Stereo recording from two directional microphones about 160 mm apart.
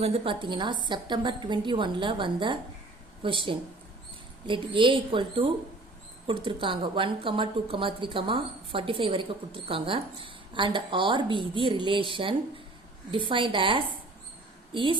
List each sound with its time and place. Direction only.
0.0 s a woman's voice: 35° right (ahead or behind)